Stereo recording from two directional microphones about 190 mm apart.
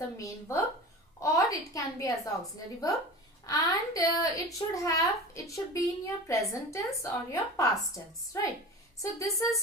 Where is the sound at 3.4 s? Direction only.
20° left (ahead or behind).